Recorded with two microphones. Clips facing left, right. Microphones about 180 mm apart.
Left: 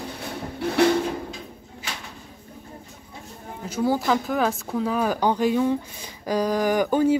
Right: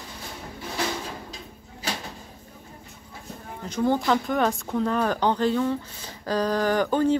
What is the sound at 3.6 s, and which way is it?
Speech, 5° left (ahead or behind).